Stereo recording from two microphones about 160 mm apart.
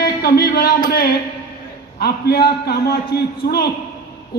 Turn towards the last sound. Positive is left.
turn(degrees=85)